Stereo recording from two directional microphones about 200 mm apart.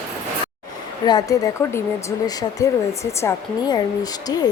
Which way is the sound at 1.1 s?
20° left (ahead or behind).